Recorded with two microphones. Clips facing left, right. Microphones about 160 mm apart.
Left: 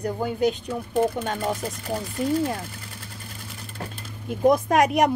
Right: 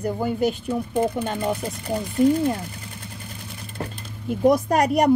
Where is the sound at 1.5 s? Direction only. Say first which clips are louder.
Right 2 dB; centre (ahead or behind).